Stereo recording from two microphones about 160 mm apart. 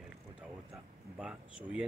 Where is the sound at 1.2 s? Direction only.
5° right (ahead or behind).